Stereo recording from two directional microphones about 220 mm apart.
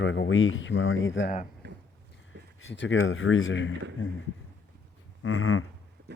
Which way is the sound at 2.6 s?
55° left (ahead or behind).